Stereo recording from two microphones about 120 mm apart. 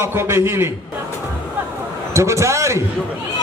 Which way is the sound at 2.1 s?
25° right (ahead or behind).